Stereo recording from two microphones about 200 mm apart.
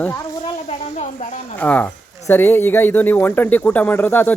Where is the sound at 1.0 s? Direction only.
35° left (ahead or behind).